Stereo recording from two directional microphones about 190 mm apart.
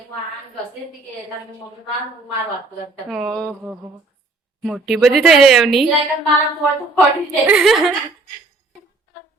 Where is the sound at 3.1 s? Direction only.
5° right (ahead or behind).